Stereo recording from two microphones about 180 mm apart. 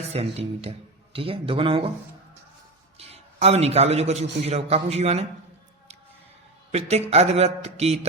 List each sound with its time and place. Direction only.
0.1 s a man's voice: 35° right (ahead or behind)
3.0 s a man's voice: 35° right (ahead or behind)
6.7 s a man's voice: 35° right (ahead or behind)